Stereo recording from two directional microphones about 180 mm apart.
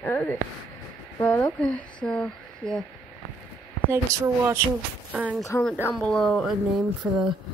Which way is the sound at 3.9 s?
15° right (ahead or behind).